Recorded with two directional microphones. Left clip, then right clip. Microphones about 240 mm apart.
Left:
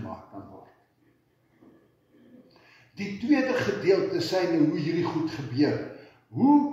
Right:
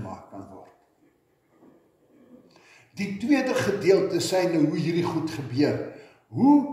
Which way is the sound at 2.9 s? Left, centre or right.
Right.